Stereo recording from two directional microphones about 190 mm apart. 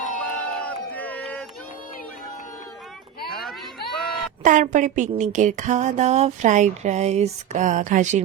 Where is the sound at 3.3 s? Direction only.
Centre (ahead or behind).